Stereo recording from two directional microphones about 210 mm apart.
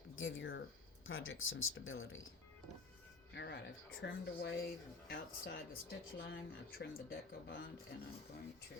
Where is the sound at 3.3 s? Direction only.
55° left (ahead or behind).